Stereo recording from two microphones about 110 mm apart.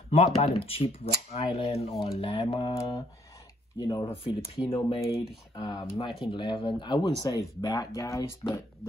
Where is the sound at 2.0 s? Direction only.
50° left (ahead or behind).